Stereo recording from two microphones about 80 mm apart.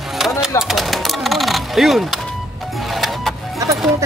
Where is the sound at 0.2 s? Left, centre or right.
Centre.